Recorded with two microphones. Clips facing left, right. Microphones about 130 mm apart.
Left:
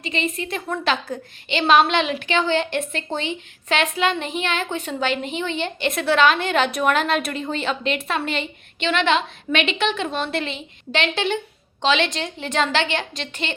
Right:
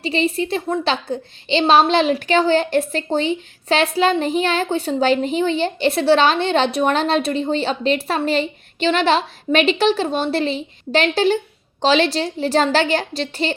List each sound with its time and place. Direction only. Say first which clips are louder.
0.0 s a woman's voice: right 6 dB; 35° right (ahead or behind)